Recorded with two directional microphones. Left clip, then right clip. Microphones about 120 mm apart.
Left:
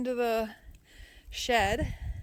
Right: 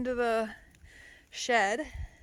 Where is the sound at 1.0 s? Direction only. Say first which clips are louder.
Left 2 dB; 20° left (ahead or behind).